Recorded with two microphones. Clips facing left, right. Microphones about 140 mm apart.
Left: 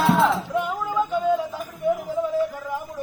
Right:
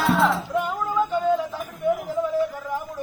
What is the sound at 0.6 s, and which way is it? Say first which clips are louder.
Music: right 1 dB; 10° left (ahead or behind).